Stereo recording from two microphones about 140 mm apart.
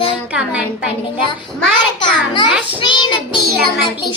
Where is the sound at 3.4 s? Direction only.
Centre (ahead or behind).